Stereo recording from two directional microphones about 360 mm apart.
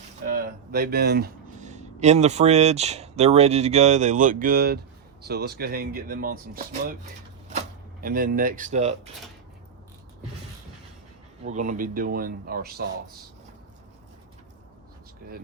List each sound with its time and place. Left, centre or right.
0.3 s speech: right
8.0 s speech: right
11.4 s speech: centre